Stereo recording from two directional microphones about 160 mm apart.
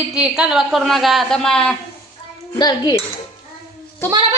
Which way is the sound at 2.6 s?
25° left (ahead or behind).